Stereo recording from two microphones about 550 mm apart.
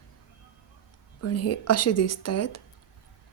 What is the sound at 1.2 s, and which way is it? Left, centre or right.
Speech, left.